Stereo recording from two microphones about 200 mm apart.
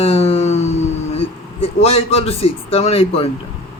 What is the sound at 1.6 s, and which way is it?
A man's voice, 30° left (ahead or behind).